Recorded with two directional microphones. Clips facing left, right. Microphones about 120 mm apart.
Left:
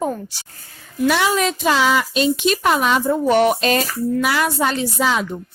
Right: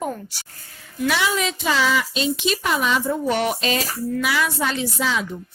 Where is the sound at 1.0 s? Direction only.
50° left (ahead or behind).